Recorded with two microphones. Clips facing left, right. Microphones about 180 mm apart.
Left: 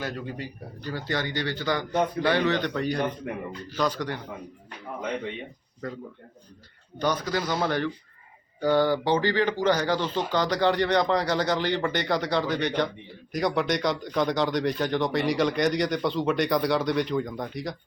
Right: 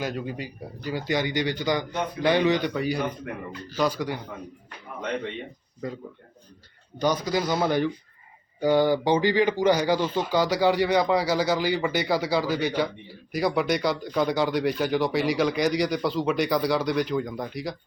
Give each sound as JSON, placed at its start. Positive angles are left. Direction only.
{"t": 0.0, "sound": "speech", "side_deg": -15}
{"t": 7.0, "sound": "speech", "side_deg": -10}